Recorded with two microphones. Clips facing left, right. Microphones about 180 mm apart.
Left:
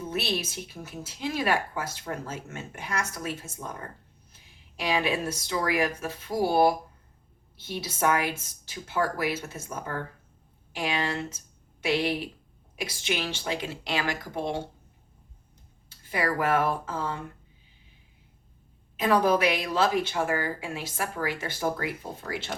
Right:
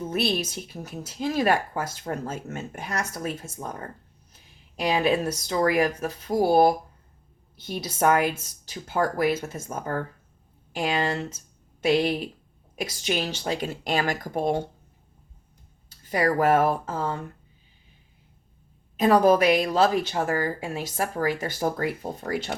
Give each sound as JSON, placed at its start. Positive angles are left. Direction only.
{"t": 0.1, "sound": "a woman's voice", "side_deg": -45}
{"t": 4.8, "sound": "a woman's voice", "side_deg": -45}
{"t": 15.9, "sound": "a woman's voice", "side_deg": -45}
{"t": 18.9, "sound": "a woman's voice", "side_deg": -45}